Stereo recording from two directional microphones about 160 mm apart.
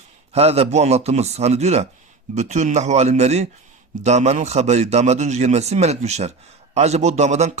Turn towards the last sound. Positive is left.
turn(degrees=-45)  # may be behind; listen again after turning